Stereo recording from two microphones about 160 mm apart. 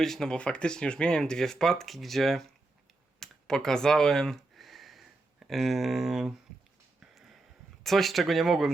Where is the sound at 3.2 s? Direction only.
5° left (ahead or behind).